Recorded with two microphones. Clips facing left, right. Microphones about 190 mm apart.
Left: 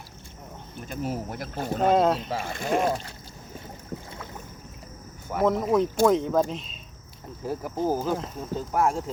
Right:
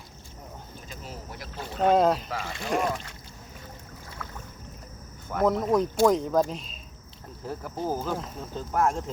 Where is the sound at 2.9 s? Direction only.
30° left (ahead or behind).